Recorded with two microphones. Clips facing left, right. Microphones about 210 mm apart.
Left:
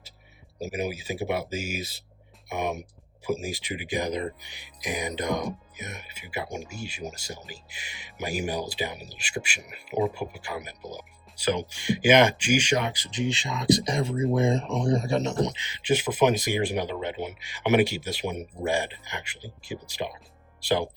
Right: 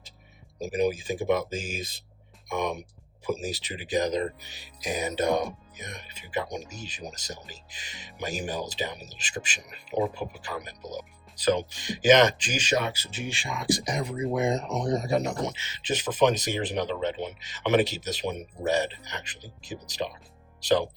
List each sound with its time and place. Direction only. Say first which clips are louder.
0.7 s speech: right 5 dB; 10° left (ahead or behind)
3.3 s speech: left 1 dB; 10° left (ahead or behind)